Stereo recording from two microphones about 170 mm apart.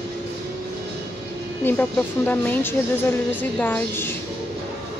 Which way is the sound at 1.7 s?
10° left (ahead or behind).